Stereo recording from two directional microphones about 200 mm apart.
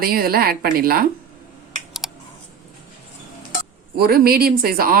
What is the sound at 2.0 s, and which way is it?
Computer keyboard, centre (ahead or behind).